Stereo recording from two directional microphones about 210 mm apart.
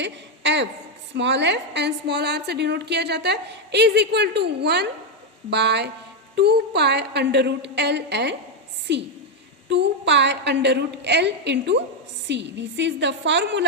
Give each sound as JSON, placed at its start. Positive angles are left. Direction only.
{"t": 0.0, "sound": "a woman's voice", "side_deg": -55}